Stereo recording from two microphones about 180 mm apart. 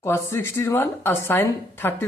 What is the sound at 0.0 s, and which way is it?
Speech, 15° left (ahead or behind).